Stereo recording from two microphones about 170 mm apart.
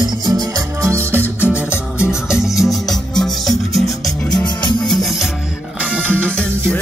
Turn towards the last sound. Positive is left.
turn(degrees=5)  # may be behind; listen again after turning